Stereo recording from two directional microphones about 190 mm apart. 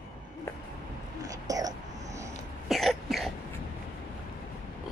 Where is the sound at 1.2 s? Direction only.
20° right (ahead or behind).